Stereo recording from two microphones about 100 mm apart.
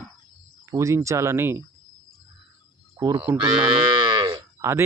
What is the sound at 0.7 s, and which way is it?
Speech, 30° right (ahead or behind).